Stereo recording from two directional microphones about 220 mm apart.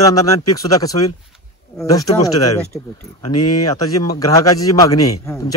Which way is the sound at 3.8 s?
15° left (ahead or behind).